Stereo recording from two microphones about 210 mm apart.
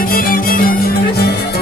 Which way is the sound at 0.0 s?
45° left (ahead or behind).